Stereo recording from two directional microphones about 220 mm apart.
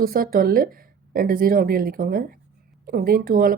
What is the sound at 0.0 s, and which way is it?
Speech, 40° right (ahead or behind).